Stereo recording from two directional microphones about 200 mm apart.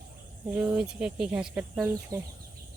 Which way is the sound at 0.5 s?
5° right (ahead or behind).